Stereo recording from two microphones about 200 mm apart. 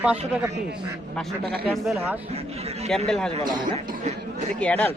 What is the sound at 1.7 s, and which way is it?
Speech, centre (ahead or behind).